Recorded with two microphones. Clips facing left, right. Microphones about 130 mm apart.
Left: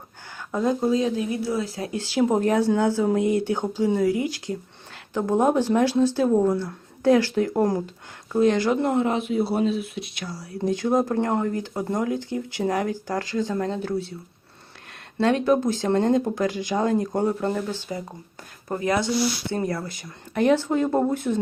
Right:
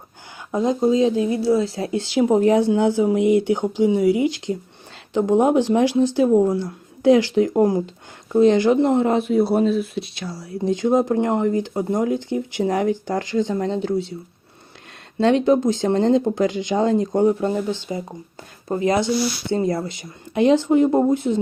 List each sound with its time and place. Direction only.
0.3 s speech: 15° right (ahead or behind)
7.9 s speech: 25° right (ahead or behind)
9.0 s speech: 40° right (ahead or behind)
15.2 s speech: 25° right (ahead or behind)